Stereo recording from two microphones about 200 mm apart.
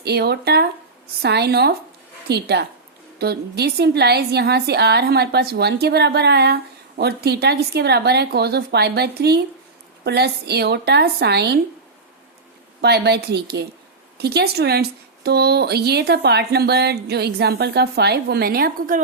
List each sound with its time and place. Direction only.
0.0 s a woman's voice: 55° right (ahead or behind)
12.8 s a woman's voice: 55° right (ahead or behind)